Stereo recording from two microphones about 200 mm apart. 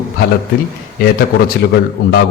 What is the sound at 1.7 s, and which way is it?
Speech, 55° left (ahead or behind).